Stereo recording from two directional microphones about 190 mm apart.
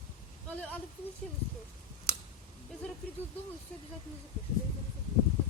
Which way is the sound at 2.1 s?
50° left (ahead or behind).